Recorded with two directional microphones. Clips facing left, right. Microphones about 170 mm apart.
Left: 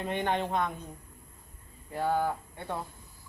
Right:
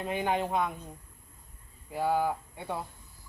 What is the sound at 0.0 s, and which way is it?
Speech, 5° right (ahead or behind).